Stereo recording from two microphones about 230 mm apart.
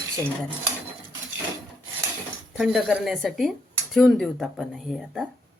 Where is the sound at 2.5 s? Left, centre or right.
Centre.